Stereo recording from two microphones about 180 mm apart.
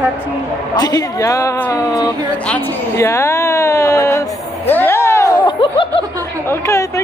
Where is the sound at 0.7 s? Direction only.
20° left (ahead or behind).